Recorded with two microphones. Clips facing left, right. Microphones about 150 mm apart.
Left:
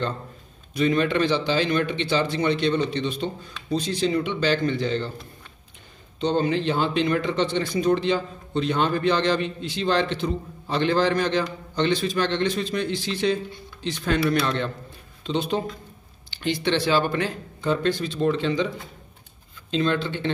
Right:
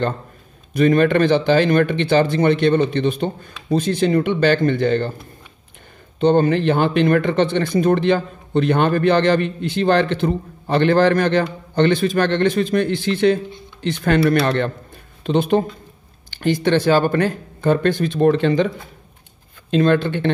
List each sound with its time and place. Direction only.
0.7 s speech: 55° right (ahead or behind)
6.1 s speech: 55° right (ahead or behind)
19.7 s speech: 55° right (ahead or behind)